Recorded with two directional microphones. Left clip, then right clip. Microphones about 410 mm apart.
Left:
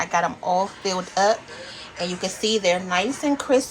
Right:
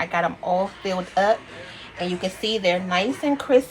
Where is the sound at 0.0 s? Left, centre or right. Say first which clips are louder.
Left 1 dB; centre.